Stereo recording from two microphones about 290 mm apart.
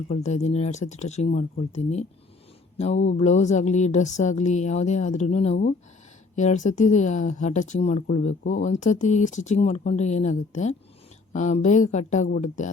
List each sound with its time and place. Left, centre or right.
0.1 s speech: left